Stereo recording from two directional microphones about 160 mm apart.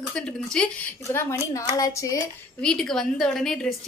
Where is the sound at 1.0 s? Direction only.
15° left (ahead or behind).